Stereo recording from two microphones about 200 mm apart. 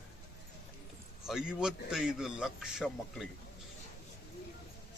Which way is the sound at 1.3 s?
5° right (ahead or behind).